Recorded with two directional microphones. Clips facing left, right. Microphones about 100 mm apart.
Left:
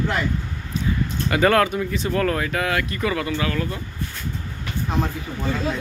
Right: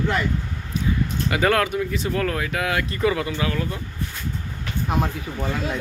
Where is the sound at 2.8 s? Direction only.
20° right (ahead or behind).